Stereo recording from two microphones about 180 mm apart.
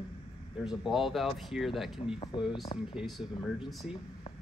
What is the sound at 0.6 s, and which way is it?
Speech, 5° right (ahead or behind).